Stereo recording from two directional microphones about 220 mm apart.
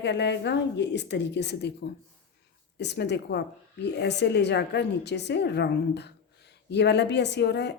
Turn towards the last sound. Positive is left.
turn(degrees=50)  # may be behind; listen again after turning